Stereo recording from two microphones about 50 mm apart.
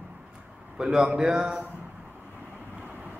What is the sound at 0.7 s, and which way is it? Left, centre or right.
Speech, centre.